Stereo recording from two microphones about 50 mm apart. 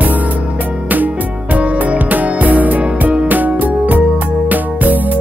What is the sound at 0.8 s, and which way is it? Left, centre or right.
Music, right.